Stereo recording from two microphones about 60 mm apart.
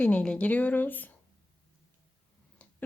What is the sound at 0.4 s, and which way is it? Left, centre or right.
Speech, left.